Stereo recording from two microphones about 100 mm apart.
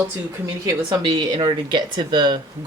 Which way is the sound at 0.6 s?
40° right (ahead or behind).